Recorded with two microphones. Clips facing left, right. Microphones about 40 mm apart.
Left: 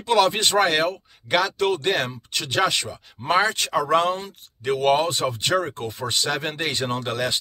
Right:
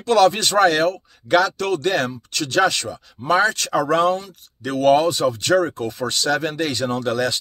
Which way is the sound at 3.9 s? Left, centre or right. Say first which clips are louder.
Right 2 dB; left.